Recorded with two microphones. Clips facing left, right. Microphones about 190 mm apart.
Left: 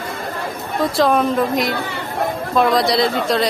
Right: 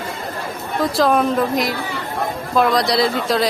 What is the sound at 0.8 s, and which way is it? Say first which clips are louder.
A woman's voice: even; centre (ahead or behind).